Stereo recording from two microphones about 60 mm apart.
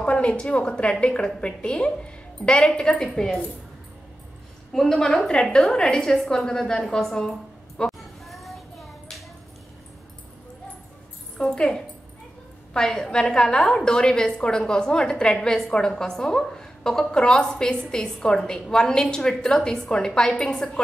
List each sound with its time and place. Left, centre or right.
0.0 s a woman's voice: centre
4.7 s a woman's voice: centre
8.0 s a sound: centre
11.3 s a woman's voice: centre